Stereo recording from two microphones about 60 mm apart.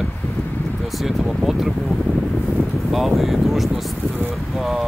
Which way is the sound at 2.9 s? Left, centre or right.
Centre.